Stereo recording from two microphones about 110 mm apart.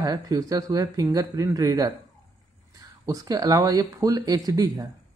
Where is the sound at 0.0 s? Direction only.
35° right (ahead or behind).